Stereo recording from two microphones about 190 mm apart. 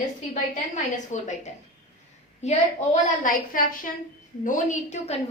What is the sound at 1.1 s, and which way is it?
Speech, 40° left (ahead or behind).